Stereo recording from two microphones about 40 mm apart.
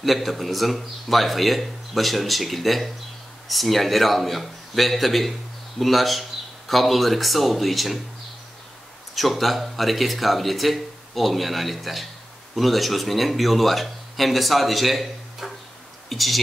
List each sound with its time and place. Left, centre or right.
0.0 s speech: centre
9.1 s speech: centre